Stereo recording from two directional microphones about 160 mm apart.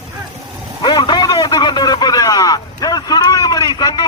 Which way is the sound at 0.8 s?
25° left (ahead or behind).